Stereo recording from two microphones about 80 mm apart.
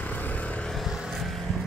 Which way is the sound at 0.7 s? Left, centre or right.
Centre.